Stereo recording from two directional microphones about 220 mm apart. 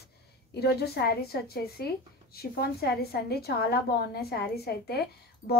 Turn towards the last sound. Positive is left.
turn(degrees=45)  # may be behind; listen again after turning